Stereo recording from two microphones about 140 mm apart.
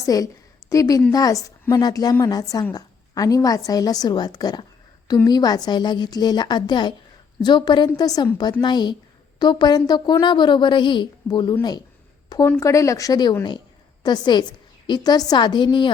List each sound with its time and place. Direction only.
0.0 s a woman's voice: 25° left (ahead or behind)
12.5 s a woman's voice: 20° left (ahead or behind)